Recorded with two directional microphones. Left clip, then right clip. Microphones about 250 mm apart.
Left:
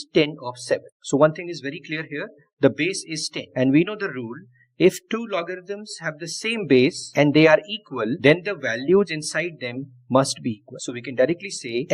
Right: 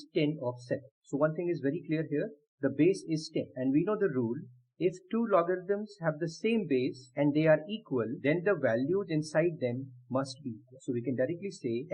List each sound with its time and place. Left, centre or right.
0.1 s speech: left
5.2 s speech: centre
5.8 s speech: left